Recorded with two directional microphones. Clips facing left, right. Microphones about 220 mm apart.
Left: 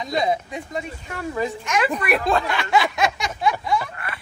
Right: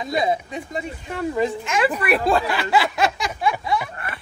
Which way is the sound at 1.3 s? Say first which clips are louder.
Right 1 dB; 30° right (ahead or behind).